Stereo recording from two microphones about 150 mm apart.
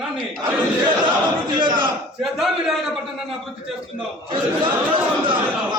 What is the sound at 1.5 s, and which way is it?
Speech, 30° right (ahead or behind).